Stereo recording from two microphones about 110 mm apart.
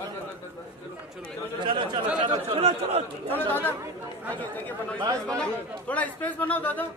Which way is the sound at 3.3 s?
15° left (ahead or behind).